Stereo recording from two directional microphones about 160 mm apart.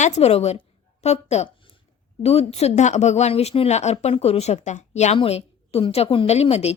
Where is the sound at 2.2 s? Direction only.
40° left (ahead or behind).